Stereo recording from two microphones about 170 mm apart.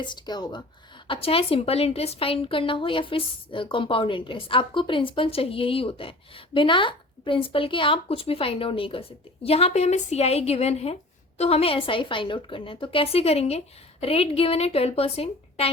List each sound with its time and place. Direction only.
0.0 s a woman's voice: 25° left (ahead or behind)